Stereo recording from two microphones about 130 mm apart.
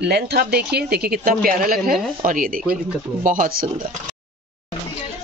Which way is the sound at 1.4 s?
90° right.